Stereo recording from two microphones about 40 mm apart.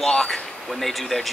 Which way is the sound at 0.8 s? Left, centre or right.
Centre.